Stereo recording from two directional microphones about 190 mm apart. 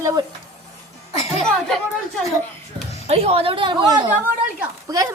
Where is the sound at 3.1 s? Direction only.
35° right (ahead or behind).